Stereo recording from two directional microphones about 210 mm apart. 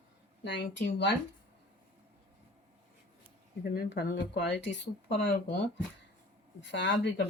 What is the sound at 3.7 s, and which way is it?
Speech, 45° left (ahead or behind).